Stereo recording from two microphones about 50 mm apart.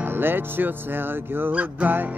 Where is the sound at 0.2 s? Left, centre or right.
Right.